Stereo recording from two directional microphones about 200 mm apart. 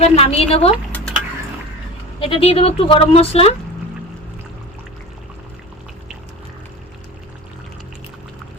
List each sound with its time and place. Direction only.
0.0 s speech: 30° left (ahead or behind)
2.1 s speech: 25° left (ahead or behind)